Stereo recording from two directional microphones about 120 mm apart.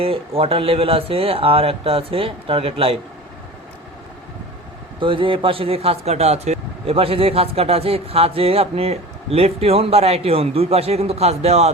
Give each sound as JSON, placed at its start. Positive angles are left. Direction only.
{"t": 0.0, "sound": "speech", "side_deg": -50}
{"t": 4.9, "sound": "speech", "side_deg": -45}